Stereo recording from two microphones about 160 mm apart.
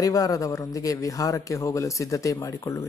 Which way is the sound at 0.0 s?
20° left (ahead or behind).